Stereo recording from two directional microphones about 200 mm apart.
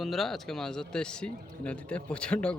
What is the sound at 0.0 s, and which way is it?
A man's voice, centre (ahead or behind).